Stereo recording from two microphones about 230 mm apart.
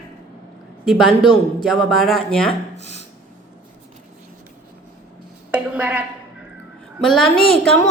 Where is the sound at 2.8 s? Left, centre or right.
Left.